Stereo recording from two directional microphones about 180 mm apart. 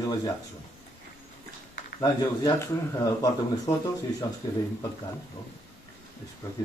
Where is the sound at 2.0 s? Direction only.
20° left (ahead or behind).